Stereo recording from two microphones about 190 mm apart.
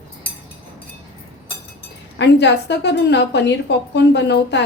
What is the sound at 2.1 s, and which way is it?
A woman's voice, 65° left (ahead or behind).